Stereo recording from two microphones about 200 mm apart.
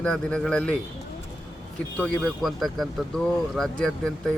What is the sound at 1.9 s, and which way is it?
Speech, 5° left (ahead or behind).